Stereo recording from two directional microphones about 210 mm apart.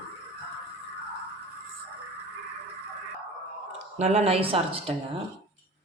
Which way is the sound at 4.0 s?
30° right (ahead or behind).